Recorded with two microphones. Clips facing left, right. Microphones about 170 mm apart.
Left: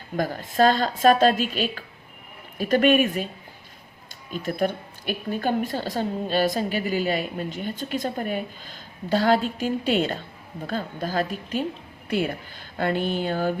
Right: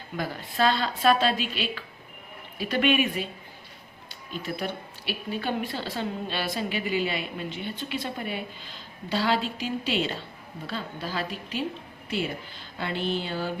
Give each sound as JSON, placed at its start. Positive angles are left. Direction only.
{"t": 0.2, "sound": "a woman's voice", "side_deg": 45}
{"t": 4.3, "sound": "a woman's voice", "side_deg": 45}